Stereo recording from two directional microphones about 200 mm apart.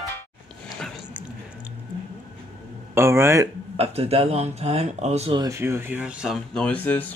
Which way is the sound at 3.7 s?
30° right (ahead or behind).